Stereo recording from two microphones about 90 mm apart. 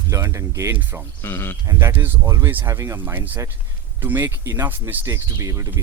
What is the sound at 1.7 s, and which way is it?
Speech, 35° right (ahead or behind).